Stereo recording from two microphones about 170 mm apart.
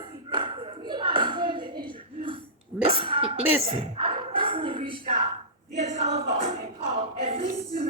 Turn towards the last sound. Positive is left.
turn(degrees=-35)  # may be behind; listen again after turning